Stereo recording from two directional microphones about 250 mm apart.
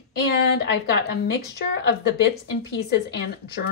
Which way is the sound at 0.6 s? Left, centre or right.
Left.